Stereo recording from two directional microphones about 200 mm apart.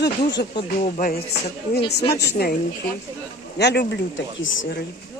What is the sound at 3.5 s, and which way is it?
Speech, 55° left (ahead or behind).